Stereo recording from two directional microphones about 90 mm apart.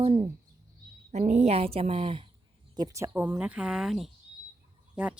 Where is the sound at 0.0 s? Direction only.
90° right.